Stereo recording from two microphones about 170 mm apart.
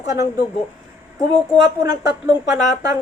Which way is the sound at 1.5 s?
25° right (ahead or behind).